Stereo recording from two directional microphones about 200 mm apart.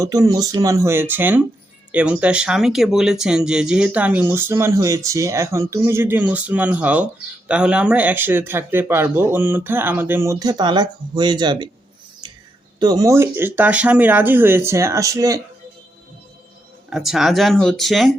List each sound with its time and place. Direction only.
0.0 s speech: 15° right (ahead or behind)
12.8 s speech: 20° right (ahead or behind)
16.9 s speech: centre (ahead or behind)